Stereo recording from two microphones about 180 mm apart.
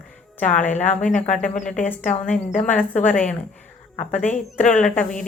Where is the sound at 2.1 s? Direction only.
45° left (ahead or behind).